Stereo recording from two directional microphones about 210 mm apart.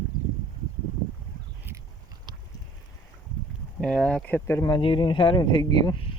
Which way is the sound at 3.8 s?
5° left (ahead or behind).